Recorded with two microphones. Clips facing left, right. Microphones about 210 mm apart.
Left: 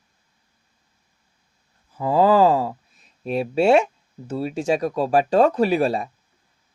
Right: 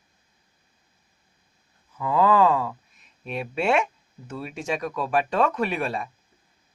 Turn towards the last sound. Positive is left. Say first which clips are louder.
# left 7 dB
turn(degrees=35)  # may be behind; listen again after turning